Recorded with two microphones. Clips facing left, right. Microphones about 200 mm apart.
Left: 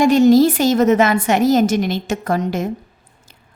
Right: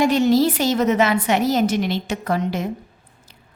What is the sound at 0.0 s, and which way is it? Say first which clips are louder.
A woman's voice: left 5 dB; 45° left (ahead or behind).